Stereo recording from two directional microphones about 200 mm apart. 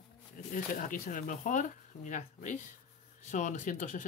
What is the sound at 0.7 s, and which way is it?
Speech, 45° left (ahead or behind).